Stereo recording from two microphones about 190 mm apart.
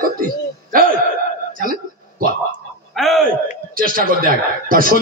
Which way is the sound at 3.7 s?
50° right (ahead or behind).